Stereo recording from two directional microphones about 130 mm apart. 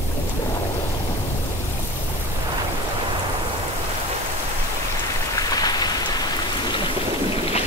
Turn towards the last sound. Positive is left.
turn(degrees=30)  # may be behind; listen again after turning